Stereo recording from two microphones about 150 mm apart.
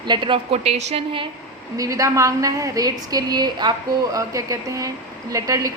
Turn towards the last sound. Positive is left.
turn(degrees=-25)  # may be behind; listen again after turning